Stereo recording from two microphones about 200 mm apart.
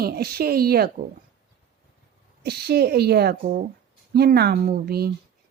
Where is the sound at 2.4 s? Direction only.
55° right (ahead or behind).